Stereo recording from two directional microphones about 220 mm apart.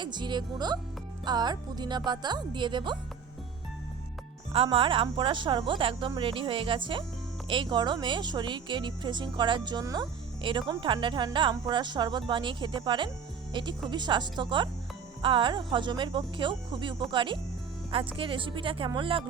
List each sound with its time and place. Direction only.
0.0 s speech: 20° right (ahead or behind)
4.5 s speech: 25° right (ahead or behind)